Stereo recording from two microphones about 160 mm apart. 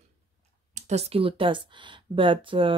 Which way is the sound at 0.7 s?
45° right (ahead or behind).